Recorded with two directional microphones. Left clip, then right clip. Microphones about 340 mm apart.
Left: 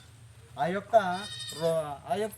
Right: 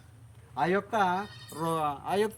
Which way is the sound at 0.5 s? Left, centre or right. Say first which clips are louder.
Left 2 dB; centre.